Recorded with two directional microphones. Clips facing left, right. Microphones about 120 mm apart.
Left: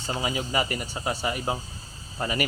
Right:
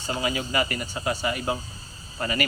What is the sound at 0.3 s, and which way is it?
Speech, 15° left (ahead or behind).